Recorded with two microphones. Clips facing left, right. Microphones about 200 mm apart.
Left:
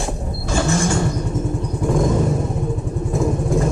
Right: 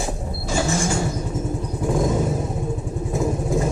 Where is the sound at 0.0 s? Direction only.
Centre (ahead or behind).